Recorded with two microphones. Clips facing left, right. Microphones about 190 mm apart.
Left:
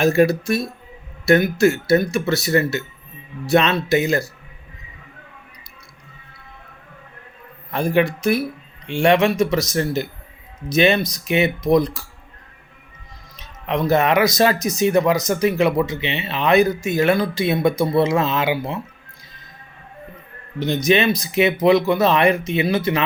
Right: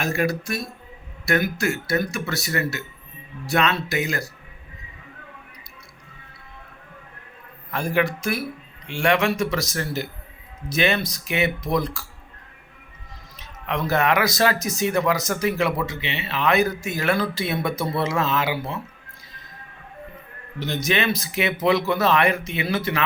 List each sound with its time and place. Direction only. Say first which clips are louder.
0.0 s speech: left 8 dB; 25° left (ahead or behind)
7.9 s speech: left 5 dB; 20° left (ahead or behind)
13.3 s speech: left 5 dB; 20° left (ahead or behind)
20.6 s speech: left 6 dB; 15° left (ahead or behind)